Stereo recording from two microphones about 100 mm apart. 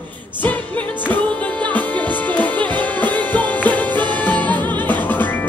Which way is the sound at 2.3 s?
15° left (ahead or behind).